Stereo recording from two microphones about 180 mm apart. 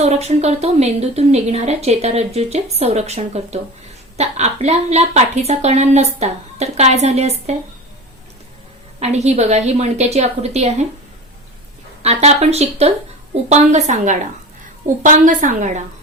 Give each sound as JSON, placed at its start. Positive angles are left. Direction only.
{"t": 0.0, "sound": "a woman's voice", "side_deg": -35}
{"t": 9.0, "sound": "a woman's voice", "side_deg": -40}
{"t": 12.0, "sound": "a woman's voice", "side_deg": -35}